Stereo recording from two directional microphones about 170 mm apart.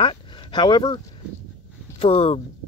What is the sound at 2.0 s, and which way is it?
Speech, 35° left (ahead or behind).